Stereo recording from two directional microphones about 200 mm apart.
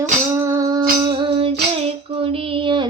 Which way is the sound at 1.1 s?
25° right (ahead or behind).